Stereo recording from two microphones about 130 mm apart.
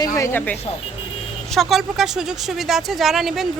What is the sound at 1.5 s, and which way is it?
Speech, centre (ahead or behind).